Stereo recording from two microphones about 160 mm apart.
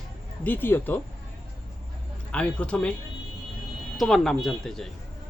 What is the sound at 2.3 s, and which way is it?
Speech, 5° left (ahead or behind).